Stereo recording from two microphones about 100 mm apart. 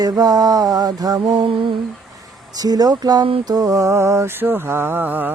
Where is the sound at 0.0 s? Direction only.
40° right (ahead or behind).